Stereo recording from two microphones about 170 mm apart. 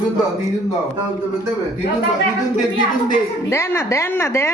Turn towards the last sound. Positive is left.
turn(degrees=15)  # may be behind; listen again after turning